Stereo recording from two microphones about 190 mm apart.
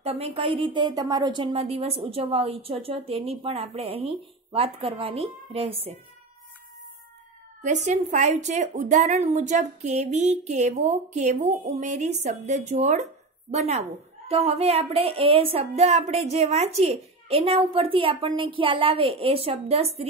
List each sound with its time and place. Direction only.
0.0 s a woman's voice: 30° right (ahead or behind)
7.6 s a woman's voice: 40° right (ahead or behind)